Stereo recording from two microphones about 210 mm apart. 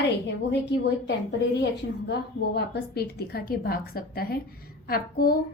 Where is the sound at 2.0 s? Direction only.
50° left (ahead or behind).